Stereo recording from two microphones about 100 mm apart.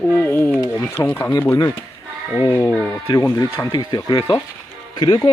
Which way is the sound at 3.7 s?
45° left (ahead or behind).